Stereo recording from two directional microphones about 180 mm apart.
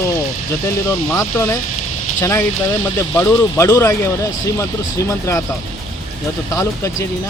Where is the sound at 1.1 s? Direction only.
15° left (ahead or behind).